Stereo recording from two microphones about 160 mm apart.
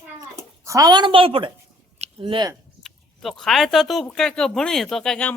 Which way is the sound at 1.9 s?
40° right (ahead or behind).